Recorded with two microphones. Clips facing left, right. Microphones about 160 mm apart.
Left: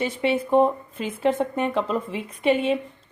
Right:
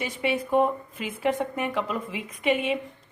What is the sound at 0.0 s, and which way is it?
Speech, 30° left (ahead or behind).